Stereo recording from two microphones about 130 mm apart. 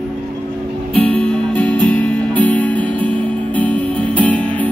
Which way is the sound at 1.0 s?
5° left (ahead or behind).